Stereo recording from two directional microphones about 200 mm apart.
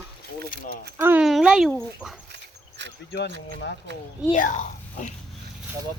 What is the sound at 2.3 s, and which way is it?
Dog, 60° right (ahead or behind).